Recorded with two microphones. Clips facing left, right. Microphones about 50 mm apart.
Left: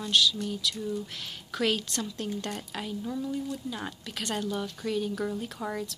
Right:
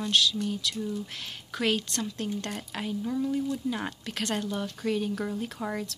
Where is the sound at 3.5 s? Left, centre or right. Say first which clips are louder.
Right 4 dB; right.